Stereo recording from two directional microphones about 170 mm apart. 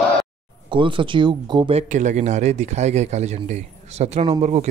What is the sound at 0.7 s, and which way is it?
Speech, 30° right (ahead or behind).